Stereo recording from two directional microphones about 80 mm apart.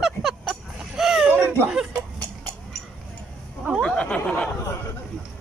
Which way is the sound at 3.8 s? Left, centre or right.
Centre.